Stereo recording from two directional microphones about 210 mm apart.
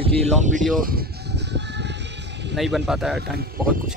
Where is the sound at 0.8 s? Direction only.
50° right (ahead or behind).